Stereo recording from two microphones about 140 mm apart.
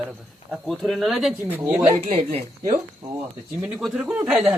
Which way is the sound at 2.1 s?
45° right (ahead or behind).